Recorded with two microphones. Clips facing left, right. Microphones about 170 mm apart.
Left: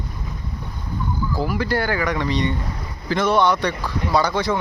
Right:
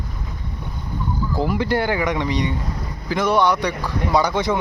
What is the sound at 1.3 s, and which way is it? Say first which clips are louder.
Speech: right 2 dB; 20° right (ahead or behind).